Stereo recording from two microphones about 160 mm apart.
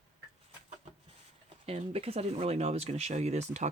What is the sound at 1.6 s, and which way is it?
Speech, 40° right (ahead or behind).